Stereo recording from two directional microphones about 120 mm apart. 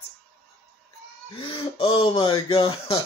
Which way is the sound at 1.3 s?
50° left (ahead or behind).